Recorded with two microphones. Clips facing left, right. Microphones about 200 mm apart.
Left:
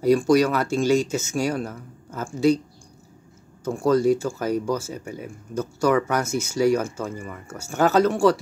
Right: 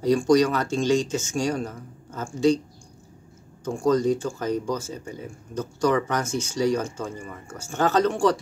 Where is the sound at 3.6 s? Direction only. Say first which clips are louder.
Left 2 dB; 10° left (ahead or behind).